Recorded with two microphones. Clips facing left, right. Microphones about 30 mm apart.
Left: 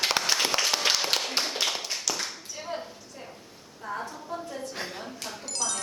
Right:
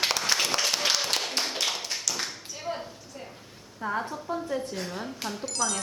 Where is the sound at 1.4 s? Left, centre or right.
Centre.